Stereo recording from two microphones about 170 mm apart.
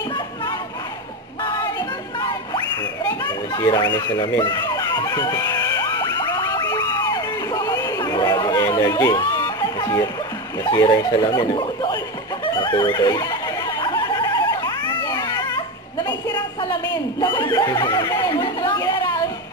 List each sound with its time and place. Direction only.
1.4 s a sound: 30° left (ahead or behind)
10.6 s speech: 20° left (ahead or behind)
12.5 s music: 25° left (ahead or behind)
16.9 s chuckle: 25° left (ahead or behind)